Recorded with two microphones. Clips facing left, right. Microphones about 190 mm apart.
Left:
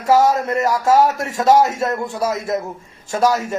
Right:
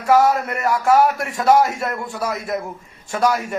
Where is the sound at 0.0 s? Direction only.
25° left (ahead or behind).